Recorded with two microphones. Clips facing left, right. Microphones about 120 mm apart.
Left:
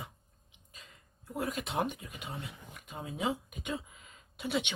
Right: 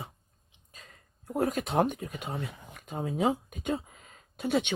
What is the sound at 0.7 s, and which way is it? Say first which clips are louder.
Speech: right 2 dB; 45° right (ahead or behind).